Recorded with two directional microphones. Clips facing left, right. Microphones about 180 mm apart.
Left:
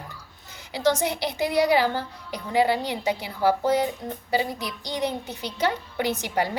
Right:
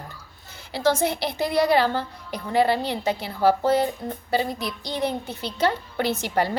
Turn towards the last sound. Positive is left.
turn(degrees=15)  # may be behind; listen again after turning